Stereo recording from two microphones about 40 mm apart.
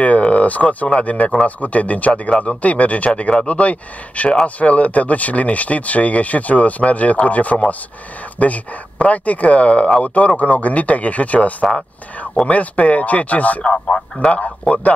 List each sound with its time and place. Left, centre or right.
0.0 s a sound: left
1.0 s speech: left
13.7 s speech: left
14.7 s speech: left